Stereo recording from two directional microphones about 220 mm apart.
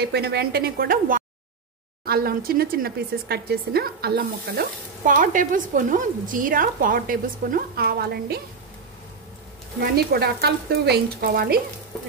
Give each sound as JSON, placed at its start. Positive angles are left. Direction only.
{"t": 0.0, "sound": "speech", "side_deg": -50}
{"t": 9.8, "sound": "speech", "side_deg": -45}